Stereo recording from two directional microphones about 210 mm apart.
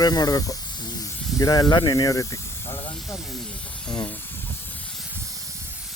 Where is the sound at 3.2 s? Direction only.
Centre (ahead or behind).